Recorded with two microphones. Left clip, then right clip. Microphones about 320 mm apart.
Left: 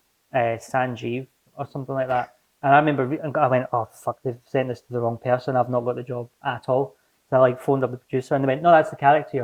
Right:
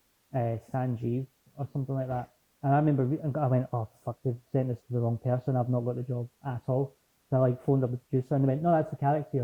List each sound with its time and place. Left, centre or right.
0.3 s speech: centre
6.7 s a sound: centre
7.3 s speech: centre